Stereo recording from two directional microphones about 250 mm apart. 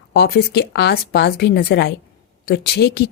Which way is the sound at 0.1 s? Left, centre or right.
Left.